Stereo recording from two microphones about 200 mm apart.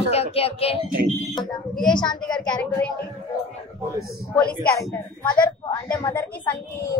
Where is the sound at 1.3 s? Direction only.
20° left (ahead or behind).